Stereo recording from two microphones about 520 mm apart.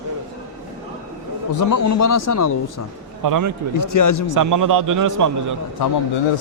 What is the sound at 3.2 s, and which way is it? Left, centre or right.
Speech, right.